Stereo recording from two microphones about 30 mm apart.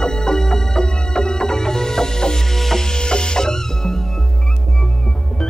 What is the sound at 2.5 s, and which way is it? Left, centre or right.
Music, centre.